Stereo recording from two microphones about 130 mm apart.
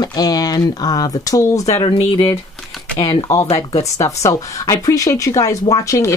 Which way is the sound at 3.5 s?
30° left (ahead or behind).